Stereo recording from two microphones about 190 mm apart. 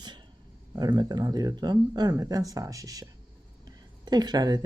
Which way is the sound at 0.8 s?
20° right (ahead or behind).